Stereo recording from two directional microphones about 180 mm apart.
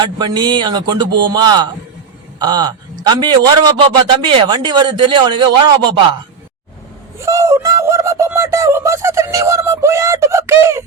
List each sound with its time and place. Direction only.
0.0 s a man's voice: 25° right (ahead or behind)
7.2 s speech: 15° right (ahead or behind)